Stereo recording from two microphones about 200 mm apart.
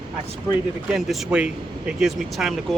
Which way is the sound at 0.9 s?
Centre (ahead or behind).